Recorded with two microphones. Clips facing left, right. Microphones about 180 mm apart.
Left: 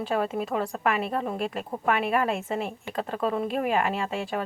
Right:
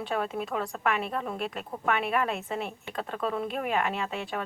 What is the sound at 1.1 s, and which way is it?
Speech, 30° left (ahead or behind).